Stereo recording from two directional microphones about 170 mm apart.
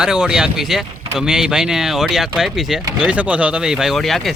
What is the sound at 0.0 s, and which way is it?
Speech, 5° right (ahead or behind).